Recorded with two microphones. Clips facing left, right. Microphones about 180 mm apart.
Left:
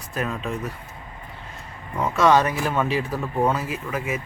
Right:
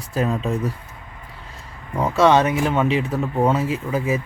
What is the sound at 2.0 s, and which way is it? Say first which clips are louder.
Speech: right 3 dB; 30° right (ahead or behind).